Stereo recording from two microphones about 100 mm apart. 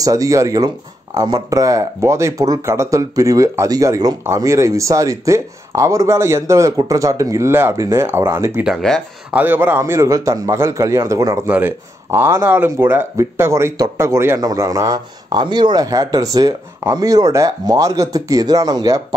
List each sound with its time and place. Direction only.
0.0 s a man's voice: 35° right (ahead or behind)
11.4 s speech: 20° right (ahead or behind); by 18.9 s 40° right (ahead or behind)